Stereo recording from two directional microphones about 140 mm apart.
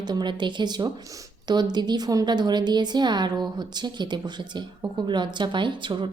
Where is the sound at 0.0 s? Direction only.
30° right (ahead or behind).